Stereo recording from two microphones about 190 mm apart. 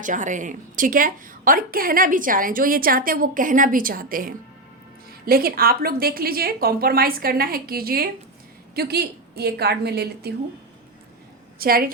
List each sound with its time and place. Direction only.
0.0 s a woman's voice: 40° right (ahead or behind); by 10.3 s 60° right (ahead or behind)
11.6 s a woman's voice: 50° right (ahead or behind)